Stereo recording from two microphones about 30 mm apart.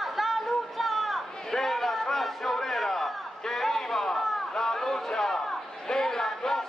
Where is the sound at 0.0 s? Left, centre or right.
Centre.